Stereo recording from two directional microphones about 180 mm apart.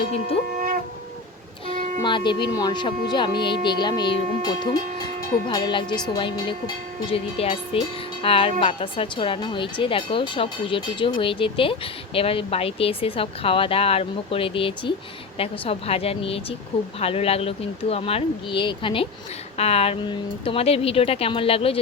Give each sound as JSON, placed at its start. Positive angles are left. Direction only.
{"t": 2.0, "sound": "speech", "side_deg": 25}